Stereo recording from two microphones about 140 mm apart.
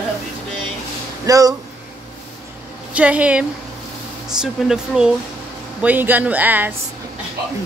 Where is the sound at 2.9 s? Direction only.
10° right (ahead or behind).